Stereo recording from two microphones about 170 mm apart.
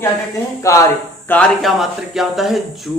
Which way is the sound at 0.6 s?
20° left (ahead or behind).